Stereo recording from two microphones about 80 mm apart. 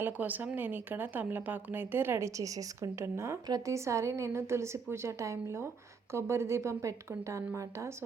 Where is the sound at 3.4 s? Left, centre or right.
Right.